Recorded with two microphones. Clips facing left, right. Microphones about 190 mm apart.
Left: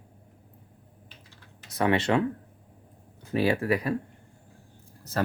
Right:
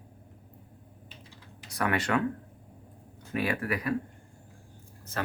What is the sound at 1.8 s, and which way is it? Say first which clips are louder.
Speech: left 4 dB; 25° left (ahead or behind).